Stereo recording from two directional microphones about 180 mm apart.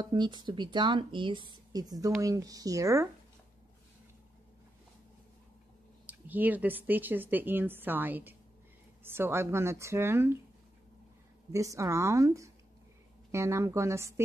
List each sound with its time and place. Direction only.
0.0 s speech: 25° right (ahead or behind)
6.0 s speech: 10° right (ahead or behind)
11.5 s speech: 20° right (ahead or behind)